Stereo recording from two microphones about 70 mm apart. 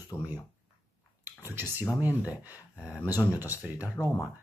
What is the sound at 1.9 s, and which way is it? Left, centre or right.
Speech, right.